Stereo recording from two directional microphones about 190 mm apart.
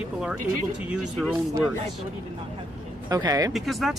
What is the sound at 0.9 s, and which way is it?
Speech, centre (ahead or behind).